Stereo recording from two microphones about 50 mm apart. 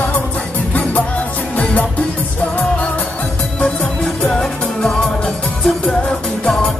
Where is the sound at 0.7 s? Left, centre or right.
Left.